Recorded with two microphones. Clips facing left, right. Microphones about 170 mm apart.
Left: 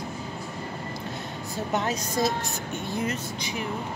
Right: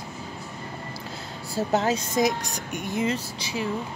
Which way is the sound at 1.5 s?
30° right (ahead or behind).